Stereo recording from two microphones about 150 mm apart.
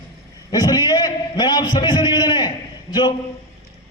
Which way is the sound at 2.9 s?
30° left (ahead or behind).